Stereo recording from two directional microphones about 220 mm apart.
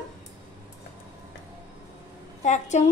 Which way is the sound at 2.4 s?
30° left (ahead or behind).